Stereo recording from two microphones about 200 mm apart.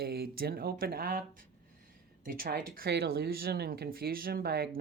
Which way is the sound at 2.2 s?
45° right (ahead or behind).